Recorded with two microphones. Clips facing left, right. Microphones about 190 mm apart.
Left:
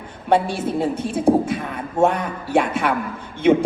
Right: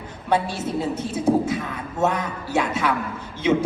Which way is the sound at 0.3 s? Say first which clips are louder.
Left 4 dB; 55° left (ahead or behind).